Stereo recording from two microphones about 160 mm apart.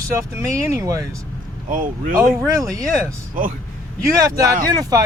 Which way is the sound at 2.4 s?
20° right (ahead or behind).